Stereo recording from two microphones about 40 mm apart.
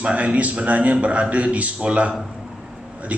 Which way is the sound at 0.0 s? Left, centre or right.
Right.